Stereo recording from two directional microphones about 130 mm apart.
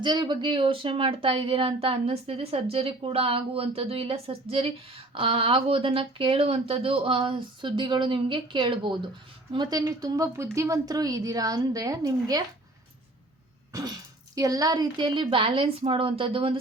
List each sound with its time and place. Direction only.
0.0 s a woman's voice: 35° right (ahead or behind)
13.7 s speech: 25° right (ahead or behind); by 16.6 s 45° right (ahead or behind)